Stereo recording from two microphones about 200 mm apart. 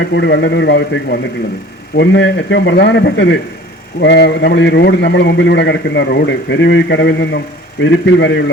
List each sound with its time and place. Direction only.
0.1 s a man's voice: 60° left (ahead or behind)